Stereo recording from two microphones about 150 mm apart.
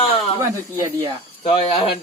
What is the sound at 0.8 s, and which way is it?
Speech, 20° right (ahead or behind).